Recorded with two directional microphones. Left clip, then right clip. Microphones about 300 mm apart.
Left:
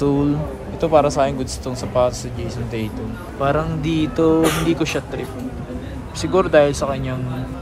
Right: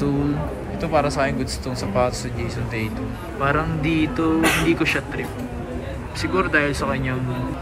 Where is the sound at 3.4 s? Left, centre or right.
Centre.